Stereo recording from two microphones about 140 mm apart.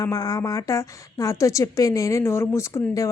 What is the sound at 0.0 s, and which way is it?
A woman's voice, 25° left (ahead or behind).